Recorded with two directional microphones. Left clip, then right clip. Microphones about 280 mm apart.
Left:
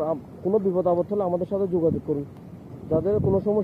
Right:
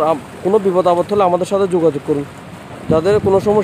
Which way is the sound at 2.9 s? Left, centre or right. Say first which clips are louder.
Right 10 dB; right.